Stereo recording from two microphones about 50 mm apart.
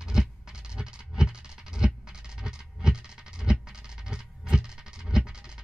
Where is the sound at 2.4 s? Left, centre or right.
Centre.